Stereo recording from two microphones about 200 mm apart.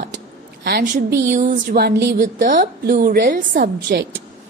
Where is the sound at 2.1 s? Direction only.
40° right (ahead or behind); by 4.2 s 60° right (ahead or behind).